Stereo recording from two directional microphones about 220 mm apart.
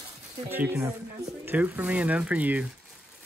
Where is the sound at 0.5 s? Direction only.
10° right (ahead or behind).